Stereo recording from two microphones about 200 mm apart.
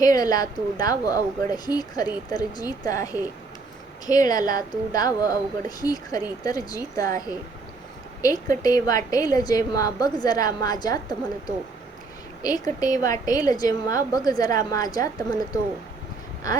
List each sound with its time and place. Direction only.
0.0 s speech: 20° left (ahead or behind)
12.4 s speech: 20° left (ahead or behind)